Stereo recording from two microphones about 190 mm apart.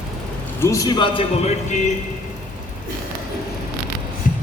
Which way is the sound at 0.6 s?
15° left (ahead or behind).